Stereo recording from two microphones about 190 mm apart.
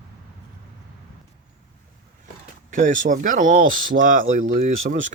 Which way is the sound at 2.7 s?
40° right (ahead or behind).